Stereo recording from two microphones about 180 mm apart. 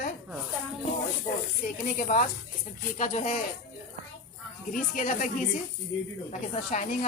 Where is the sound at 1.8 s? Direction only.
50° left (ahead or behind).